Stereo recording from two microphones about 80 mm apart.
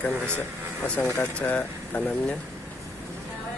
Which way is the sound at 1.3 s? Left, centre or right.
Centre.